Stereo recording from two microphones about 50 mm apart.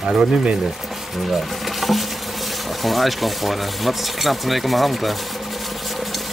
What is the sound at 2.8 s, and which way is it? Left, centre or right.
Speech, centre.